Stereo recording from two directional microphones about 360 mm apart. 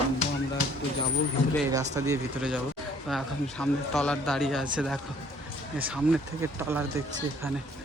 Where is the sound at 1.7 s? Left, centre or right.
Centre.